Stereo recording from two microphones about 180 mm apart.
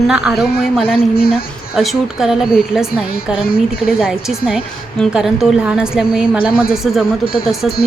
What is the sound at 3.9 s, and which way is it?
A woman's voice, 5° right (ahead or behind).